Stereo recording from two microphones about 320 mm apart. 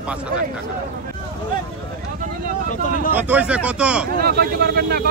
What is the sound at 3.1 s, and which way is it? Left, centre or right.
Speech, centre.